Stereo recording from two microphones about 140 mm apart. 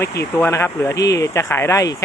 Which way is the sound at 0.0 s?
20° left (ahead or behind).